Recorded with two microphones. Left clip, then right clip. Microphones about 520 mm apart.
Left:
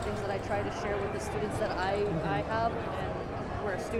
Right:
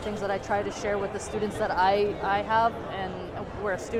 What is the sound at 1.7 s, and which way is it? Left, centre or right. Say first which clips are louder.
Speech: right 11 dB; right.